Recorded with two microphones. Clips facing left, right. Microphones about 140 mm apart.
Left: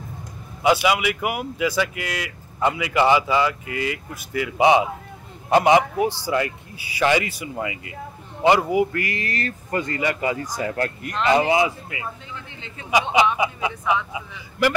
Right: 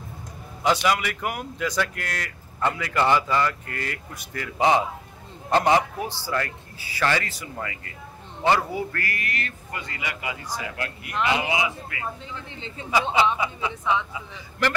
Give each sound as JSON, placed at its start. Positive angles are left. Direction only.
{"t": 0.6, "sound": "speech", "side_deg": 10}
{"t": 11.9, "sound": "speech", "side_deg": 20}